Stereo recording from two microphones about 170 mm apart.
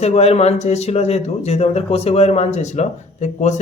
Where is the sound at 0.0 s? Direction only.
40° left (ahead or behind).